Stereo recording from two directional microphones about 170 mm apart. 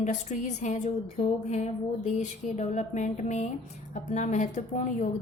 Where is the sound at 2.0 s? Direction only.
45° left (ahead or behind).